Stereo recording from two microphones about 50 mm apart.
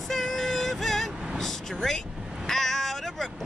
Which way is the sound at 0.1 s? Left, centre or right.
Centre.